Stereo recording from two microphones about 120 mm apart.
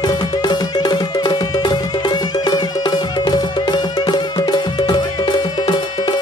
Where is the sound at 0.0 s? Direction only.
35° left (ahead or behind).